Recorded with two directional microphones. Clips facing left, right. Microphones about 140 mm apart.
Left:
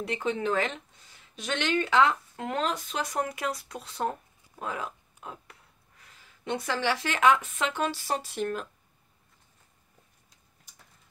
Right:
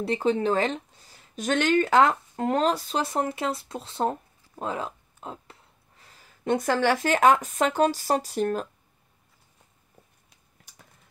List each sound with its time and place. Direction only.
0.0 s speech: 35° right (ahead or behind)